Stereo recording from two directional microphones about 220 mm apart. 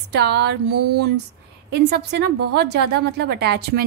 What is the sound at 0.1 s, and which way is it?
A woman's voice, 50° right (ahead or behind).